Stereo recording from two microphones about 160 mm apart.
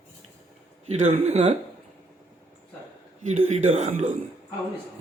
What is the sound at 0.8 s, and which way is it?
Speech, 45° right (ahead or behind).